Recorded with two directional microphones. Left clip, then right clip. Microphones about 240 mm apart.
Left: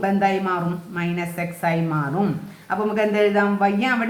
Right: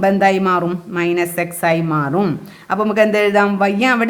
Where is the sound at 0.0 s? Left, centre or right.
Right.